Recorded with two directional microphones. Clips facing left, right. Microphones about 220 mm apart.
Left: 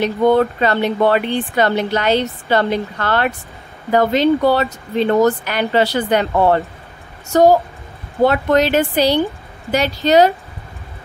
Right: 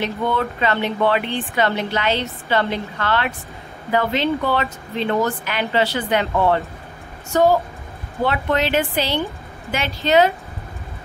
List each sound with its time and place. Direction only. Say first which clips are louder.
0.0 s speech: left 8 dB; 40° left (ahead or behind)